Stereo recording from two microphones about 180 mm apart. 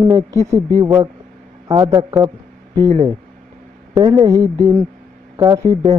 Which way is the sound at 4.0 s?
25° right (ahead or behind).